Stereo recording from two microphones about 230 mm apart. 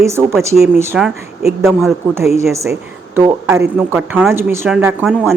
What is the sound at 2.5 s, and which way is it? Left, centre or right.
Speech, centre.